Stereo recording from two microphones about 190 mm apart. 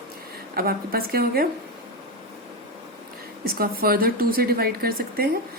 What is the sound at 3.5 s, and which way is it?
A woman's voice, 50° right (ahead or behind).